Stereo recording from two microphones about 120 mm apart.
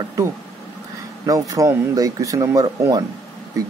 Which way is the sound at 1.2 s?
30° right (ahead or behind).